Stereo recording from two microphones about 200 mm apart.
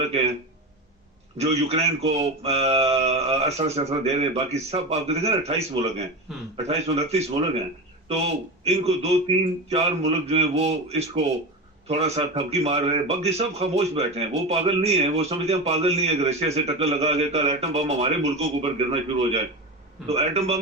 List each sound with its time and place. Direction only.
1.4 s a man's voice: 30° right (ahead or behind)